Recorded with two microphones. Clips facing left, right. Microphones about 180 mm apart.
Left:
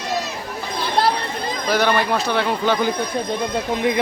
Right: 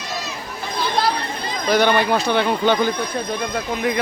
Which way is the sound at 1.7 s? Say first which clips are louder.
Right 2 dB; centre (ahead or behind).